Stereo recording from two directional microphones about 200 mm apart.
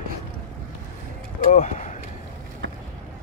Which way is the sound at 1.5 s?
35° left (ahead or behind).